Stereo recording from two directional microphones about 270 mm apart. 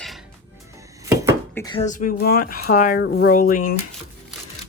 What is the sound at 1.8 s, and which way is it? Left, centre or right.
Speech, left.